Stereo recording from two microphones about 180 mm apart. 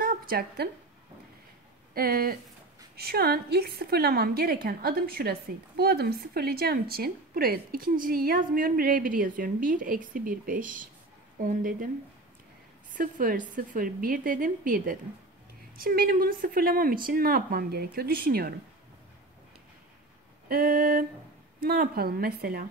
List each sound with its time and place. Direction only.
0.0 s a sound: 55° right (ahead or behind)
2.0 s a woman's voice: 55° right (ahead or behind)
12.9 s a woman's voice: 50° right (ahead or behind)
20.4 s a woman's voice: 50° right (ahead or behind)